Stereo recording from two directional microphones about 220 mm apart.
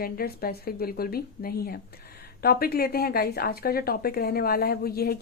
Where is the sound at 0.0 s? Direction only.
45° left (ahead or behind).